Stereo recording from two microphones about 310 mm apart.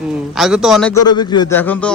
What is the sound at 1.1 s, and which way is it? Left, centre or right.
Speech, centre.